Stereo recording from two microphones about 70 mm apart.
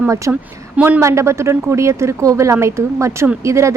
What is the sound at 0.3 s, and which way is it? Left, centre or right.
Speech, right.